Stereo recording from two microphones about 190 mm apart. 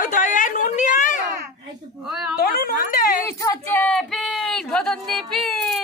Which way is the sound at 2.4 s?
50° left (ahead or behind).